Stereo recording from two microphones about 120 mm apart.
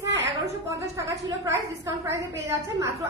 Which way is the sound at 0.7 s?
25° right (ahead or behind).